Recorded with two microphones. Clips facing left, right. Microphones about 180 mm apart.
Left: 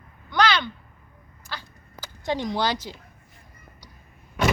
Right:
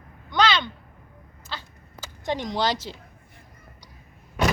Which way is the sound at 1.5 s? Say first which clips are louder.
Even; 20° right (ahead or behind).